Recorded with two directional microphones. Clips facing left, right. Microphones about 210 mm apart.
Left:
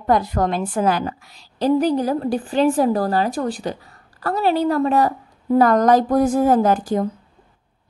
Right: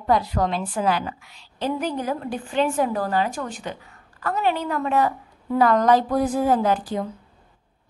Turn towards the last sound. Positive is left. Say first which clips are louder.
# left 5 dB
turn(degrees=45)  # may be behind; listen again after turning